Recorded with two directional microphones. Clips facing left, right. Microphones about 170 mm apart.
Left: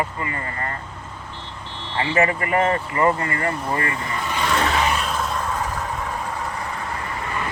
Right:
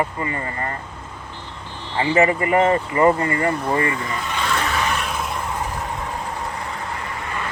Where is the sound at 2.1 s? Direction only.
20° right (ahead or behind).